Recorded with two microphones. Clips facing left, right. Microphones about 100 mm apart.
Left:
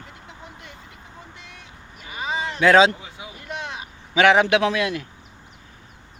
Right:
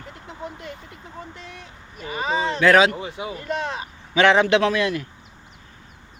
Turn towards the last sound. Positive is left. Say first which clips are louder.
# right 1 dB
turn(degrees=15)  # may be behind; listen again after turning